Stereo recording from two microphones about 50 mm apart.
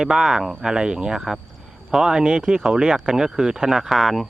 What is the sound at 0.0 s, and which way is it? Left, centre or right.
Speech, centre.